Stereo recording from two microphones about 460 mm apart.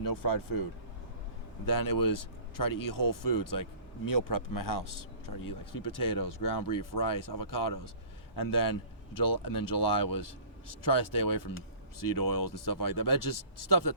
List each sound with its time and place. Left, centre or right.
0.0 s speech: left
1.6 s speech: left